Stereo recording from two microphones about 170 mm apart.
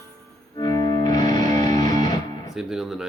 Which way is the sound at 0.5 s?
20° left (ahead or behind).